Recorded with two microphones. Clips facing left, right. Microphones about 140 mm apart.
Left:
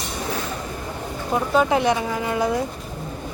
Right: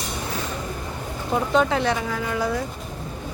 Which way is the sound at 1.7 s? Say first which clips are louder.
Left 3 dB; 15° left (ahead or behind).